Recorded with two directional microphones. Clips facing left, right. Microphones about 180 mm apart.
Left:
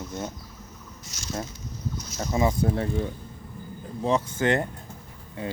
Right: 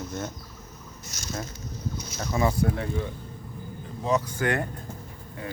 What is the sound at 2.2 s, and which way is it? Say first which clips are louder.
Speech: left 1 dB; 20° left (ahead or behind).